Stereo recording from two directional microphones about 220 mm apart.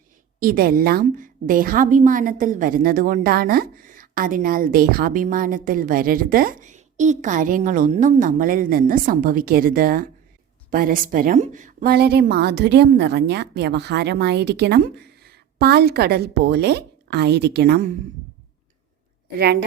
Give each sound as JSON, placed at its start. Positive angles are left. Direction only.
{"t": 0.3, "sound": "a woman's voice", "side_deg": -40}